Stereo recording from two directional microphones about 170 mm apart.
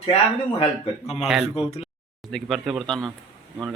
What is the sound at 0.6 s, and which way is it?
Speech, 35° left (ahead or behind).